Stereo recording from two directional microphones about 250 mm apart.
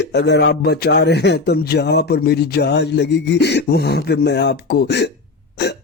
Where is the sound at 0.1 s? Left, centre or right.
Left.